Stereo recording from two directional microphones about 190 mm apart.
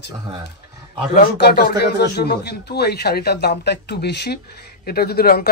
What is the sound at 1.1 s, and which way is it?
Speech, 55° left (ahead or behind).